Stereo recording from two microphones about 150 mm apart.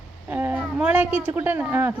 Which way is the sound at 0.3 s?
15° right (ahead or behind).